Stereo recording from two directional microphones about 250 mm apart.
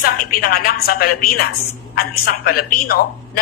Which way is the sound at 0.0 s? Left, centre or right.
Left.